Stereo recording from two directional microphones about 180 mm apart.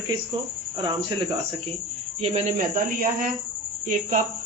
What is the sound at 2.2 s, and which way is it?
Speech, 40° right (ahead or behind).